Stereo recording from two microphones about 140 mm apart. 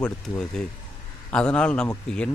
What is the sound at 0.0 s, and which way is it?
Speech, 5° left (ahead or behind).